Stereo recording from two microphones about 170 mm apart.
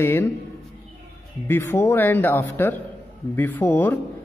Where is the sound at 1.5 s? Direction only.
15° left (ahead or behind).